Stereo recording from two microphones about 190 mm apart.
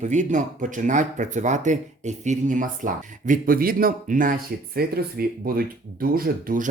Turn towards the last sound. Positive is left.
turn(degrees=-45)  # may be behind; listen again after turning